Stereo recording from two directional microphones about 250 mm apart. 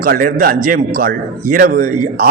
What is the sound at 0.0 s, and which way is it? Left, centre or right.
A man's voice, right.